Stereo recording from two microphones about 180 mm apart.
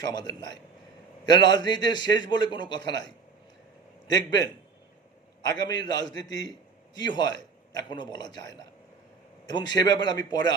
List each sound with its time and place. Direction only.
0.0 s a man's voice: 20° left (ahead or behind)
4.1 s a man's voice: 20° left (ahead or behind)